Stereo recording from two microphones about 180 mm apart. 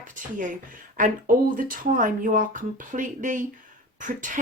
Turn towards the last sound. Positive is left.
turn(degrees=-45)  # may be behind; listen again after turning